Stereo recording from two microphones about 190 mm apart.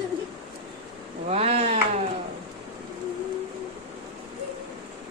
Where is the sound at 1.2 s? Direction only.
35° right (ahead or behind).